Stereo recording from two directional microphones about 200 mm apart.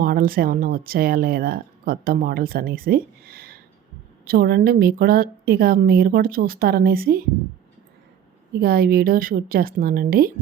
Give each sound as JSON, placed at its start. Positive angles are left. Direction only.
{"t": 0.0, "sound": "speech", "side_deg": -45}
{"t": 8.6, "sound": "speech", "side_deg": -50}